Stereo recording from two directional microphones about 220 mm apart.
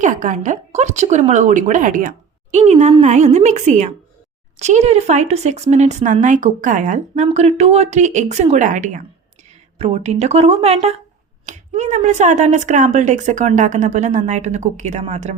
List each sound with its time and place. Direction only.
0.0 s speech: 35° right (ahead or behind)